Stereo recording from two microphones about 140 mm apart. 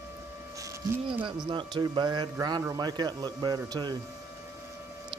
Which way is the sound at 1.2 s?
35° right (ahead or behind).